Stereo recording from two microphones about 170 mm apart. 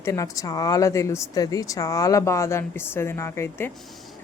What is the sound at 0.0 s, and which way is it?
Speech, 20° left (ahead or behind).